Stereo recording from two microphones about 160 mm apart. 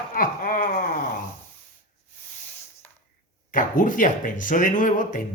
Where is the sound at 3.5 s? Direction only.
55° left (ahead or behind).